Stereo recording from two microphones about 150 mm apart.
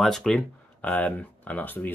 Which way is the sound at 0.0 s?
Centre (ahead or behind).